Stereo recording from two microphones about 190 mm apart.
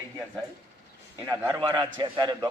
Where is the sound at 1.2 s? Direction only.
20° right (ahead or behind).